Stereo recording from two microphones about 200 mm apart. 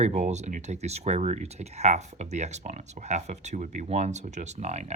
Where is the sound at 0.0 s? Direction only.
35° right (ahead or behind).